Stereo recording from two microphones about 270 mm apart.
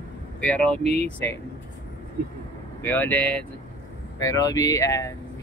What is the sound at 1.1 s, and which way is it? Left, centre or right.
Speech, centre.